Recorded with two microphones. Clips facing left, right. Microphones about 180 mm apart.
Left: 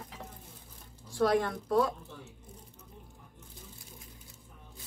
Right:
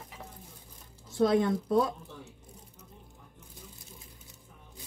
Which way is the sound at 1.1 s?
20° right (ahead or behind).